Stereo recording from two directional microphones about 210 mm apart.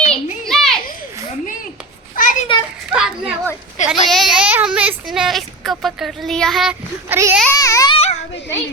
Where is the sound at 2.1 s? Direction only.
40° left (ahead or behind).